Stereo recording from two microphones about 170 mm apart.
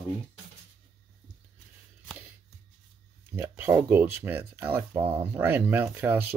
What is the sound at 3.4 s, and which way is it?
Speech, 10° right (ahead or behind).